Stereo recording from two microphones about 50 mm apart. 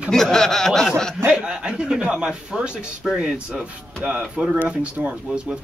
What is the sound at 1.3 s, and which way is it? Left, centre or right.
A man's voice, centre.